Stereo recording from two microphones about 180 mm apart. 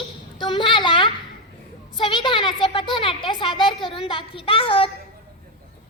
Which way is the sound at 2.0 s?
25° left (ahead or behind).